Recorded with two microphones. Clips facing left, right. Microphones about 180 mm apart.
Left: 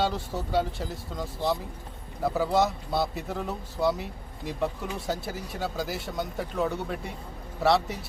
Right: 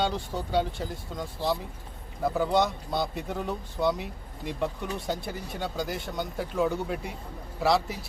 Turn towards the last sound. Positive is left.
turn(degrees=0)  # may be behind; listen again after turning